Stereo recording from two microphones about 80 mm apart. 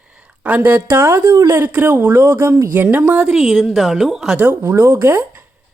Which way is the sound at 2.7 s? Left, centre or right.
Right.